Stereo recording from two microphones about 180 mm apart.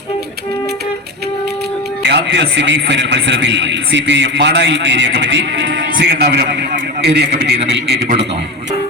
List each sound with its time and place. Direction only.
2.0 s a man's voice: 70° right (ahead or behind)